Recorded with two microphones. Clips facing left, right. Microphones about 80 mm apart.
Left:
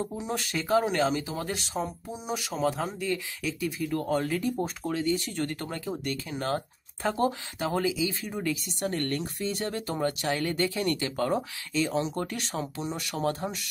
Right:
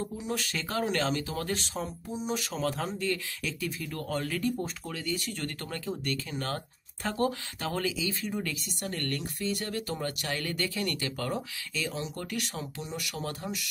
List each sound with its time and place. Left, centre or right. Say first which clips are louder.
0.0 s speech: left 2 dB; left